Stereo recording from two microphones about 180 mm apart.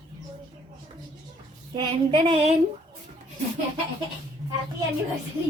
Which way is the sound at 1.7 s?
25° right (ahead or behind).